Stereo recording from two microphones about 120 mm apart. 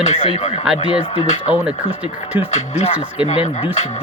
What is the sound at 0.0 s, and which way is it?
Speech, 65° left (ahead or behind).